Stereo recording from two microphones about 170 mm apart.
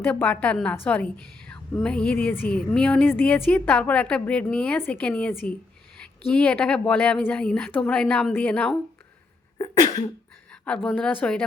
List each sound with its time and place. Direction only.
0.0 s a woman's voice: 10° left (ahead or behind)
9.6 s cough: 20° left (ahead or behind)
10.8 s a woman's voice: 5° left (ahead or behind)